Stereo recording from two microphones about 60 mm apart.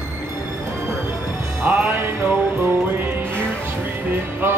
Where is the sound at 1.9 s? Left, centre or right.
Right.